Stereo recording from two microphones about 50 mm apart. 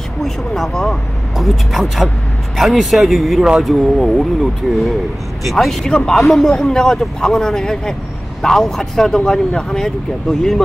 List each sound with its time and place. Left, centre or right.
0.2 s a man's voice: centre
5.9 s a man's voice: centre